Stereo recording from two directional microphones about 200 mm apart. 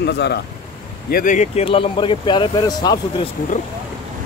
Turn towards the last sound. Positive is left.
turn(degrees=20)  # may be behind; listen again after turning